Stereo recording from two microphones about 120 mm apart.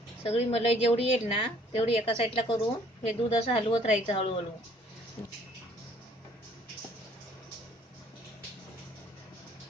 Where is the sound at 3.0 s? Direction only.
55° left (ahead or behind).